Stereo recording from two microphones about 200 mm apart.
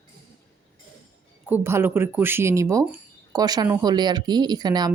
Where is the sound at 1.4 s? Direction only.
10° right (ahead or behind).